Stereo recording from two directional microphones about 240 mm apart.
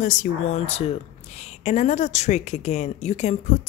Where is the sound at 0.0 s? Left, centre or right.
Left.